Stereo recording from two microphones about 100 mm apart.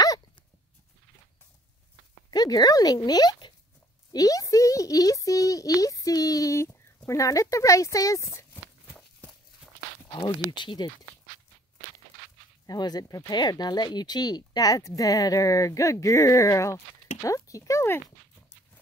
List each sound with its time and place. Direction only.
2.3 s speech: 40° left (ahead or behind)
10.5 s speech: 50° left (ahead or behind)
12.6 s speech: 40° left (ahead or behind); by 18.0 s 25° left (ahead or behind)